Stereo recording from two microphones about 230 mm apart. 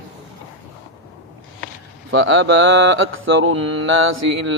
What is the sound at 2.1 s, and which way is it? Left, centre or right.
Mantra, right.